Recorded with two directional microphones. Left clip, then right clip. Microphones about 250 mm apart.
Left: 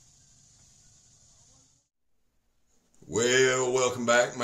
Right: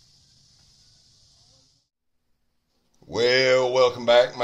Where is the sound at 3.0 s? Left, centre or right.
Centre.